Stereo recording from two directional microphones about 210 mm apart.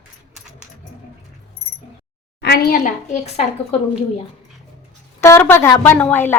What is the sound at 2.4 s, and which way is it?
A woman's voice, 50° left (ahead or behind).